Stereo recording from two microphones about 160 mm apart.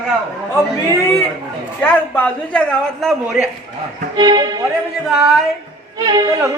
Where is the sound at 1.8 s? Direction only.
10° left (ahead or behind).